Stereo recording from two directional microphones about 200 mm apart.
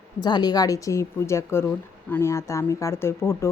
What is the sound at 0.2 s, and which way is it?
A woman's voice, 20° left (ahead or behind).